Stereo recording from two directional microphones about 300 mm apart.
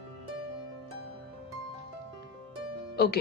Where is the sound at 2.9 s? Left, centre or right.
Left.